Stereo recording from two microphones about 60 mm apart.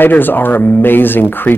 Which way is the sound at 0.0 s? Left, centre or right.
Left.